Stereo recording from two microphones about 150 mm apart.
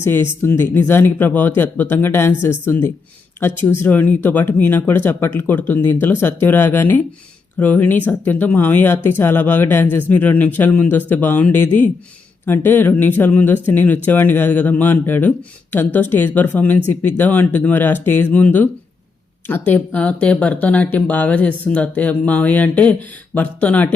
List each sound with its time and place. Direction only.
0.0 s speech: 15° left (ahead or behind)